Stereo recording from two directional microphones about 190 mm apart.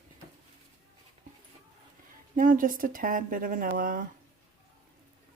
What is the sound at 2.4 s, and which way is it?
Speech, 45° right (ahead or behind).